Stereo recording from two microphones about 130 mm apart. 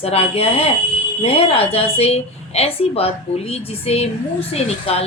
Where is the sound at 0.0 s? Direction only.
50° left (ahead or behind).